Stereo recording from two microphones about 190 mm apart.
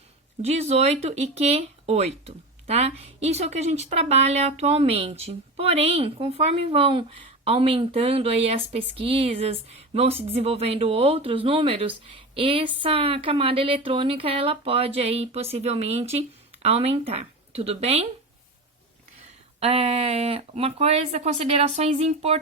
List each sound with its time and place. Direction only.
0.4 s speech: 35° right (ahead or behind)
19.5 s speech: 30° right (ahead or behind)